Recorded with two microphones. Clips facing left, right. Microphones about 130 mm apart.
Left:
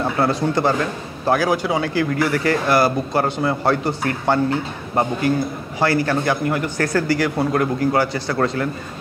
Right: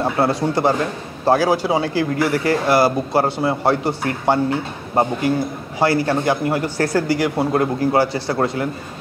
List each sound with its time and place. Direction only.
0.0 s a man's voice: 25° right (ahead or behind)